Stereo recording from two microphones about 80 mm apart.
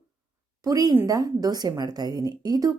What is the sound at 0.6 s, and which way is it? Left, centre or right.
Speech, right.